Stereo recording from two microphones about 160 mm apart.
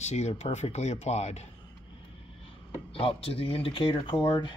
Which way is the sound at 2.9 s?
35° left (ahead or behind).